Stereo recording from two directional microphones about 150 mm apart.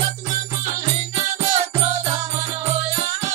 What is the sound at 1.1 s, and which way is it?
Music, 45° right (ahead or behind).